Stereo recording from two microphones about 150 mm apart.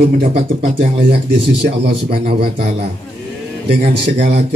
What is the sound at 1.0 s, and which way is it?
Speech, 40° right (ahead or behind).